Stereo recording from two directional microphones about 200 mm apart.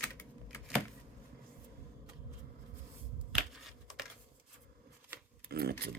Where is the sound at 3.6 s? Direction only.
Centre (ahead or behind).